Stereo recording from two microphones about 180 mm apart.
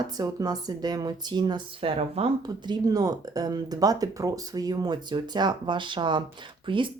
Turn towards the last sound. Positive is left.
turn(degrees=-25)  # may be behind; listen again after turning